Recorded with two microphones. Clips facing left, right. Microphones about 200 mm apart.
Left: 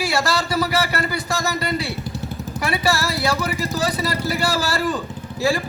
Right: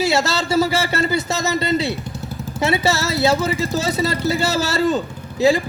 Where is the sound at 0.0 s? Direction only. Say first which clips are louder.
Right 3 dB; 25° right (ahead or behind).